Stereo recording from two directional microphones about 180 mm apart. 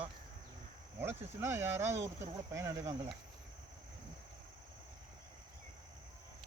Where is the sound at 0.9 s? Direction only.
10° right (ahead or behind).